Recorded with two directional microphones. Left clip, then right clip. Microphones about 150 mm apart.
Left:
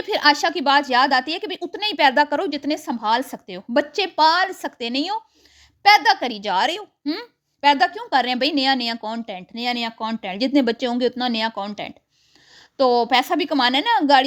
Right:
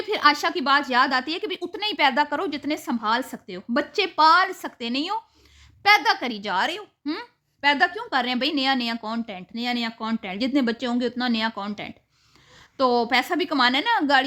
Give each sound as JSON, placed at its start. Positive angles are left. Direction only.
{"t": 0.1, "sound": "a woman's voice", "side_deg": 30}
{"t": 3.9, "sound": "a woman's voice", "side_deg": 25}
{"t": 7.6, "sound": "a woman's voice", "side_deg": 30}